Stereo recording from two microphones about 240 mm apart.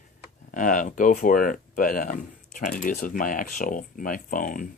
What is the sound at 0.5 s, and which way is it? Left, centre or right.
Speech, left.